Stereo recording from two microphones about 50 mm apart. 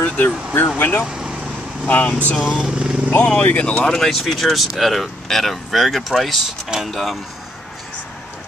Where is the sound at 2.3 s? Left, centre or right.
Centre.